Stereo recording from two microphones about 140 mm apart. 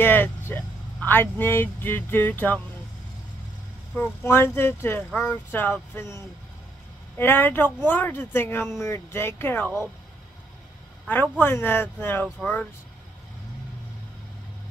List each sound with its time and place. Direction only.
0.0 s speech: 15° left (ahead or behind)
3.9 s speech: 15° left (ahead or behind)
11.1 s speech: 15° left (ahead or behind)